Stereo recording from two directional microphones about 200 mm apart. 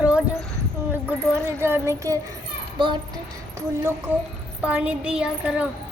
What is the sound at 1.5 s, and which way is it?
A child's voice, 10° right (ahead or behind).